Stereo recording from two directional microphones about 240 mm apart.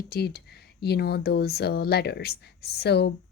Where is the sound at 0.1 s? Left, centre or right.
Left.